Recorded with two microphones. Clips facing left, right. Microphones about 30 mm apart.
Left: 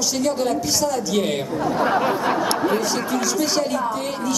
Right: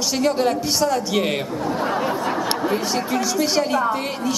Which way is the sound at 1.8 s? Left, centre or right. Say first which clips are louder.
Left 3 dB; left.